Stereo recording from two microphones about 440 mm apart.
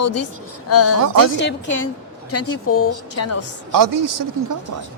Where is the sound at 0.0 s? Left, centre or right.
Left.